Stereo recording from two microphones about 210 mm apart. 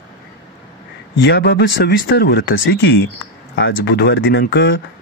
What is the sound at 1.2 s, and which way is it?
Speech, 55° left (ahead or behind).